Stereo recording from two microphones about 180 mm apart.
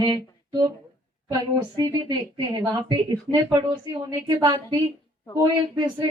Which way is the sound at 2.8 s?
25° right (ahead or behind).